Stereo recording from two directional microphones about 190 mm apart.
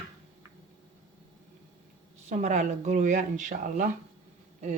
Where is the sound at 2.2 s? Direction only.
40° right (ahead or behind).